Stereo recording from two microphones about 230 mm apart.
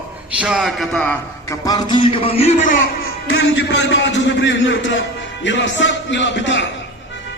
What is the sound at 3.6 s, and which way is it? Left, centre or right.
A man's voice, left.